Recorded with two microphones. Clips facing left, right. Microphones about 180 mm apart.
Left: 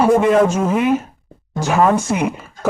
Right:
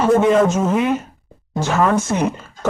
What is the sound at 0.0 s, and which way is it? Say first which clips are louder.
Speech: left 1 dB; 5° left (ahead or behind).